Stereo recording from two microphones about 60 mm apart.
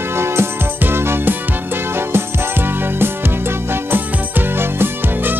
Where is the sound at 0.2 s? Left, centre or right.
Right.